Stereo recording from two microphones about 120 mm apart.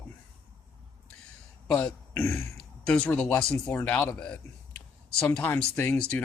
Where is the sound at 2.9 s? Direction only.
10° left (ahead or behind).